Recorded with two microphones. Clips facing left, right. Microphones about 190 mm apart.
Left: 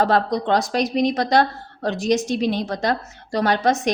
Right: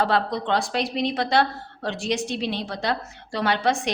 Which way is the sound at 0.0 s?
40° left (ahead or behind).